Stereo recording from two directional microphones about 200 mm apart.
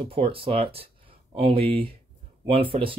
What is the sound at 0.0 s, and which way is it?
Speech, 25° right (ahead or behind).